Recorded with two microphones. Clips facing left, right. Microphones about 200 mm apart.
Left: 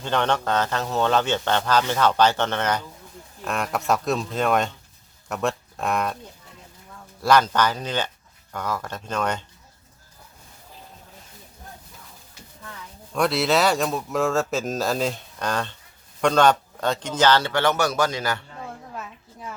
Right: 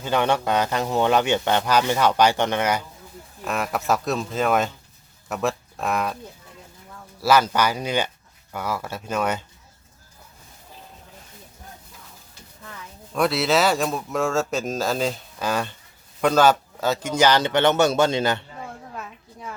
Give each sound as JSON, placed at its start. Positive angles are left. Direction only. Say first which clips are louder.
{"t": 0.0, "sound": "a man's voice", "louder": "right 2 dB", "side_deg": -10}
{"t": 7.2, "sound": "a man's voice", "louder": "even", "side_deg": -5}
{"t": 13.1, "sound": "a man's voice", "louder": "even", "side_deg": 0}
{"t": 18.9, "sound": "a sound", "louder": "even", "side_deg": 0}